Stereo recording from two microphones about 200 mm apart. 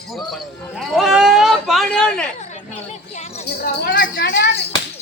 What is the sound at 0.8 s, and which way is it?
Speech, centre (ahead or behind).